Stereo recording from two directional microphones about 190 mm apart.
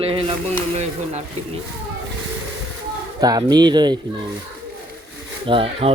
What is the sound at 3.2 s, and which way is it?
Speech, 20° right (ahead or behind).